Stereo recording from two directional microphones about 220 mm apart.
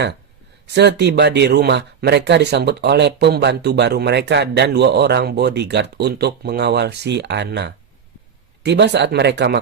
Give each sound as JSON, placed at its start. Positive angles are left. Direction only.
{"t": 0.7, "sound": "speech", "side_deg": -50}